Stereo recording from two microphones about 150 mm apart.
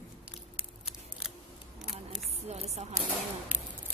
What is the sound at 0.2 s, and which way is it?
Scissors, 5° right (ahead or behind).